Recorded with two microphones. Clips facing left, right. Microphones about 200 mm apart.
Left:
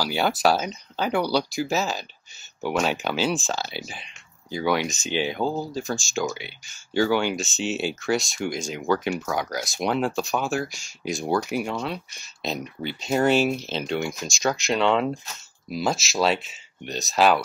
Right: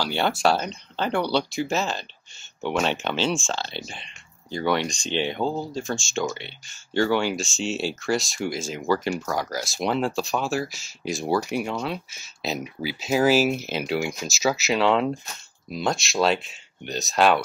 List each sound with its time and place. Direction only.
0.0 s speech: 5° left (ahead or behind)